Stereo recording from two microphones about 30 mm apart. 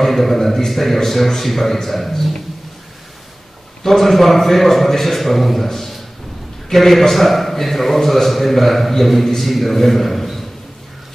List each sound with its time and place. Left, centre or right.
0.0 s a man's voice: centre
3.8 s a man's voice: centre